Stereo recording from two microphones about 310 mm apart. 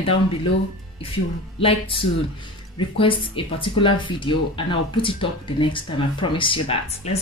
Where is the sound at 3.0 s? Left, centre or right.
Centre.